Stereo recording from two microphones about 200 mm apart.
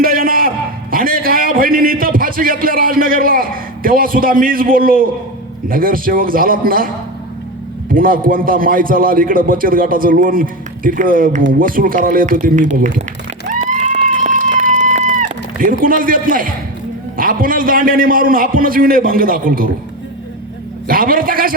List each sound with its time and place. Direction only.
0.0 s a sound: 45° right (ahead or behind)
5.6 s a man's voice: 45° right (ahead or behind)
7.9 s a man's voice: 45° right (ahead or behind)
13.5 s a sound: 35° right (ahead or behind)
15.8 s a man's voice: 45° right (ahead or behind)
20.8 s a man's voice: 45° right (ahead or behind)